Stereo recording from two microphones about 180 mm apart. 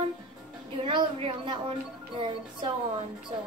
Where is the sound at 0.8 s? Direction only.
30° right (ahead or behind).